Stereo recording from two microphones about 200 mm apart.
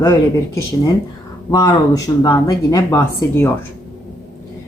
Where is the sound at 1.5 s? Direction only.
20° left (ahead or behind).